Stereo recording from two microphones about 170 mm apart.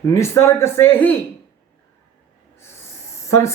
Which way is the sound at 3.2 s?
15° left (ahead or behind).